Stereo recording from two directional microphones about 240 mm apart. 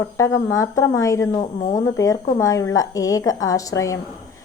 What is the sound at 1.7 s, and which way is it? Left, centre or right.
A woman's voice, centre.